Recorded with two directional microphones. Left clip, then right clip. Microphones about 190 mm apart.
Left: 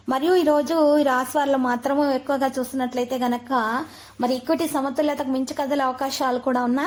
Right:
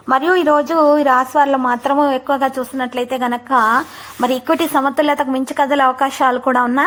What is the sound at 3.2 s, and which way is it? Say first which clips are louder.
A woman's voice: right 11 dB; 15° right (ahead or behind).